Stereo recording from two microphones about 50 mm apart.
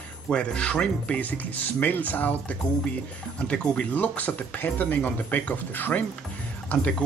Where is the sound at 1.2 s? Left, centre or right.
Left.